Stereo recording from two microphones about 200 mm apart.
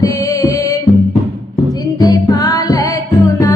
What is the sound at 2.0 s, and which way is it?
Music, 20° left (ahead or behind).